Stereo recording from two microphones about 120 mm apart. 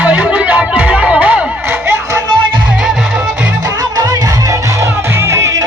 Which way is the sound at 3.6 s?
35° right (ahead or behind).